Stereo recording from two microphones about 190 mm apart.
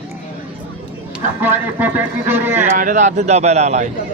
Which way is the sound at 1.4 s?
10° right (ahead or behind).